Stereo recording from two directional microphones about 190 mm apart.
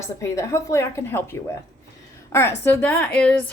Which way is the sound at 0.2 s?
15° left (ahead or behind).